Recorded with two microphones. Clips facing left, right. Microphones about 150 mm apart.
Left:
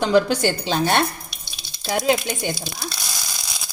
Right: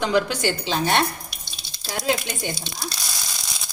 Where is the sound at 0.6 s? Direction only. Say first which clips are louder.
Left 2 dB; 50° left (ahead or behind).